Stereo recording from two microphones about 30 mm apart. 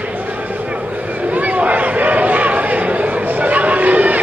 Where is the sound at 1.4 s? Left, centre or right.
Right.